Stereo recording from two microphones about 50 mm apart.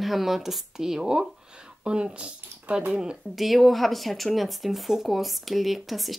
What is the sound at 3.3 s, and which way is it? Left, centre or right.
Speech, centre.